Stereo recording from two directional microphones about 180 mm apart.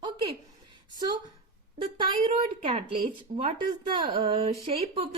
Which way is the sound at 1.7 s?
25° right (ahead or behind).